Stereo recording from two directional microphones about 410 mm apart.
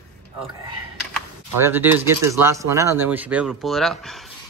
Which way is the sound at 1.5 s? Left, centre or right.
Centre.